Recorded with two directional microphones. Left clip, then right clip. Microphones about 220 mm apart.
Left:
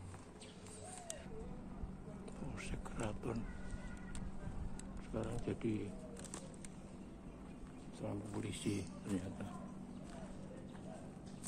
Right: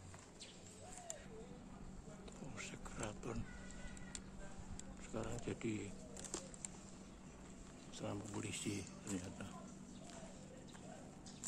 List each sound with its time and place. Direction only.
2.5 s a sound: centre (ahead or behind)
5.1 s a man's voice: 5° right (ahead or behind)
8.0 s speech: 25° right (ahead or behind)
8.5 s a man's voice: centre (ahead or behind)